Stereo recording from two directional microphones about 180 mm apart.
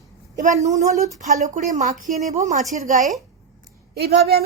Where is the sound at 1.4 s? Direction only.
40° right (ahead or behind).